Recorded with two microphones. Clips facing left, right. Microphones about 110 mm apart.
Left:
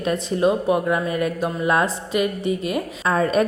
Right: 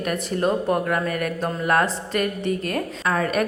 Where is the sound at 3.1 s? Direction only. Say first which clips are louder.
Left 4 dB; 25° left (ahead or behind).